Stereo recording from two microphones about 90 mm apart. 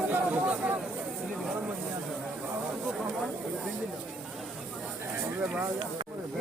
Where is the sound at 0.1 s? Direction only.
15° right (ahead or behind).